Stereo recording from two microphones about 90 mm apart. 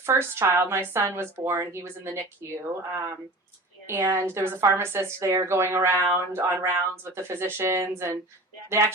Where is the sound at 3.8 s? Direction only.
30° right (ahead or behind).